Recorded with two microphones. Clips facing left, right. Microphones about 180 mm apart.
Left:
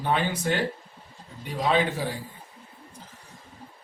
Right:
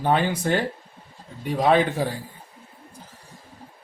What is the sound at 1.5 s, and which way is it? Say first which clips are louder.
Speech: right 5 dB; 55° right (ahead or behind).